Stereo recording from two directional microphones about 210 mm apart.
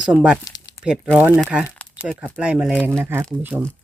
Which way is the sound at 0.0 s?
5° right (ahead or behind).